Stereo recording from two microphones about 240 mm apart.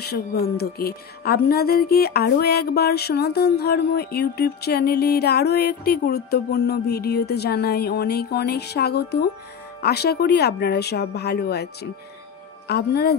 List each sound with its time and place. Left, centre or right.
0.0 s speech: left